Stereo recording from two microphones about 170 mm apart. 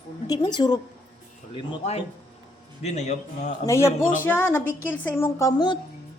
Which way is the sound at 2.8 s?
40° left (ahead or behind).